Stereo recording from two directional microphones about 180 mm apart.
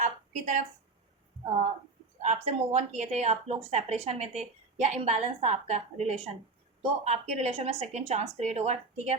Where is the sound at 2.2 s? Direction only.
35° right (ahead or behind).